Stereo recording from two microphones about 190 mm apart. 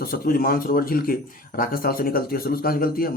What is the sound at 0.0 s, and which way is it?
Speech, 50° left (ahead or behind).